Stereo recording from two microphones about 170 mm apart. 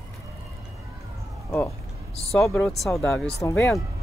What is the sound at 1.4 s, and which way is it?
Speech, 15° left (ahead or behind).